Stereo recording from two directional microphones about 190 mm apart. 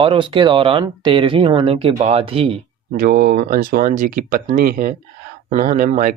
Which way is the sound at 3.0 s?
50° right (ahead or behind).